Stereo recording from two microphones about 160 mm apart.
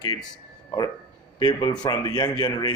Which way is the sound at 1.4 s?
25° left (ahead or behind).